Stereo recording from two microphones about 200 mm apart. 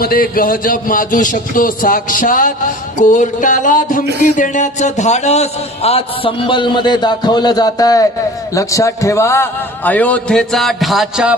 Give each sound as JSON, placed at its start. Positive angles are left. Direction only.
{"t": 0.0, "sound": "a man's voice", "side_deg": 45}
{"t": 3.0, "sound": "a sound", "side_deg": 40}
{"t": 4.2, "sound": "a man's voice", "side_deg": 40}